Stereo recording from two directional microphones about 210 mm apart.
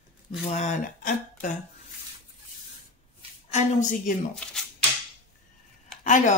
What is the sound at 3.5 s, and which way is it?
Speech, 35° left (ahead or behind).